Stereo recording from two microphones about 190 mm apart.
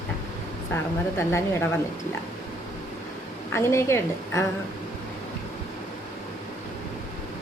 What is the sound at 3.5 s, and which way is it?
Speech, 15° left (ahead or behind).